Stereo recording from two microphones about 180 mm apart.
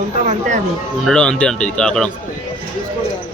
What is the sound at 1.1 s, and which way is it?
Speech, 5° left (ahead or behind).